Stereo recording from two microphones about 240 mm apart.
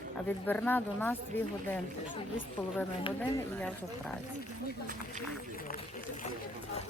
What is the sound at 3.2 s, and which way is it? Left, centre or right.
Speech, centre.